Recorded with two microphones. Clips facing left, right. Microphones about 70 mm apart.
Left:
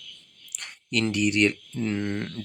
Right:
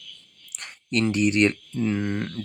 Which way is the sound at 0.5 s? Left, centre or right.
Right.